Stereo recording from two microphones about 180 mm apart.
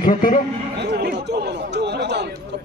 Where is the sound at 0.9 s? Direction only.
65° right (ahead or behind).